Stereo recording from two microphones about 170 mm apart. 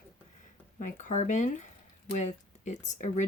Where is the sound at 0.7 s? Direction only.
45° left (ahead or behind).